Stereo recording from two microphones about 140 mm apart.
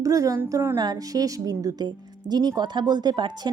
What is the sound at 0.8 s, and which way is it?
Speech, 30° right (ahead or behind).